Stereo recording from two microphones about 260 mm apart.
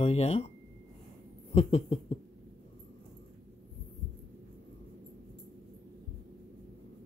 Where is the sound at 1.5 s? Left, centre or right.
Left.